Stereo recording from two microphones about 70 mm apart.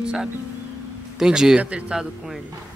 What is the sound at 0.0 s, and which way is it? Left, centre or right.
Speech, centre.